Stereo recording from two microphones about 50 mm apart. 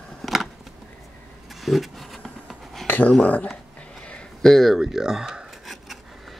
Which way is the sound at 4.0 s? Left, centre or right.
Centre.